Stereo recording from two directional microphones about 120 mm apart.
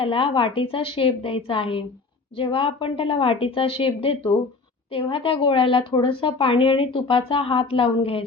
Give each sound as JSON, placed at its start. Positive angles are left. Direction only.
{"t": 0.0, "sound": "a woman's voice", "side_deg": 45}